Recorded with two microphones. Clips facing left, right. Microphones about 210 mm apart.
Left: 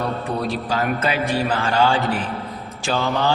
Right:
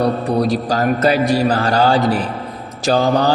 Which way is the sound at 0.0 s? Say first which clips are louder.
Right 8 dB; 40° right (ahead or behind).